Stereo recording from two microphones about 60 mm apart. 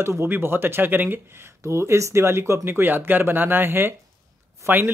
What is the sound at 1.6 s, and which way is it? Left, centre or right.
A man's voice, right.